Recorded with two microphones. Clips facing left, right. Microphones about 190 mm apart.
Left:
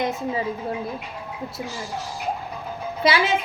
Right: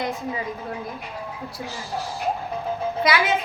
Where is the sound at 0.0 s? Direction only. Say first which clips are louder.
Left 3 dB; 25° left (ahead or behind).